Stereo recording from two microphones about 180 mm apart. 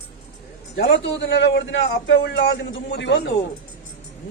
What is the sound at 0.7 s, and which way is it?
A man's voice, 80° left.